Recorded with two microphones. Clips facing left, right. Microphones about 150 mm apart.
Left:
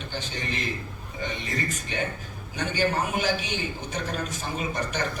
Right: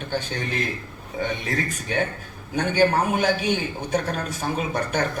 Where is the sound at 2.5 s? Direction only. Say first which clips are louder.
Right 6 dB; 55° right (ahead or behind).